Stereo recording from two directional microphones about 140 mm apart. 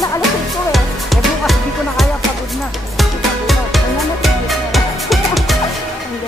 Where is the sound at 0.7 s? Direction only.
Centre (ahead or behind).